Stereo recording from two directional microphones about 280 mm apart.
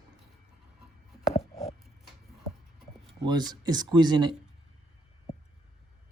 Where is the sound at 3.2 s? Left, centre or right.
Centre.